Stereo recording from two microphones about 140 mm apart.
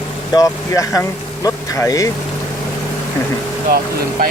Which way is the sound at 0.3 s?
25° left (ahead or behind).